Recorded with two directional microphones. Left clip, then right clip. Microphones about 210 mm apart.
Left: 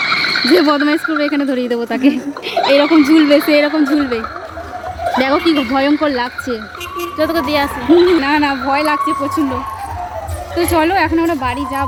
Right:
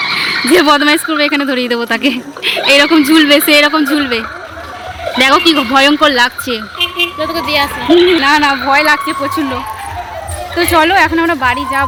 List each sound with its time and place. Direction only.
0.4 s speech: centre (ahead or behind)
7.2 s a woman's voice: 55° left (ahead or behind)
8.2 s speech: centre (ahead or behind)
10.6 s speech: centre (ahead or behind)